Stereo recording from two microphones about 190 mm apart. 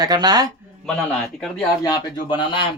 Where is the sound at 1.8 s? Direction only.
20° left (ahead or behind).